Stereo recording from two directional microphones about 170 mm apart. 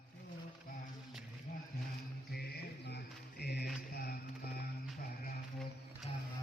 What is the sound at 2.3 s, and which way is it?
Mantra, 70° left (ahead or behind).